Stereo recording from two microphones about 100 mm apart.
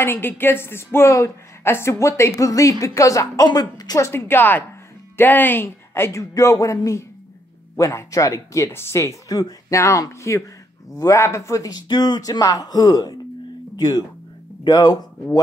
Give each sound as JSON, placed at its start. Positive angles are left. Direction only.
{"t": 0.0, "sound": "a woman's voice", "side_deg": 25}
{"t": 4.1, "sound": "a woman's voice", "side_deg": 20}